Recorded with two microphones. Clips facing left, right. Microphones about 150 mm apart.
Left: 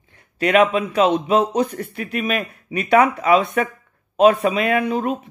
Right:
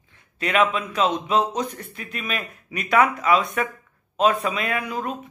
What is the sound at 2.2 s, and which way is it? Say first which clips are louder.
Speech: left 7 dB; 30° left (ahead or behind).